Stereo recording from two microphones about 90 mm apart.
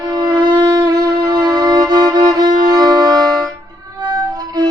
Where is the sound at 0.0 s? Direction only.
50° right (ahead or behind).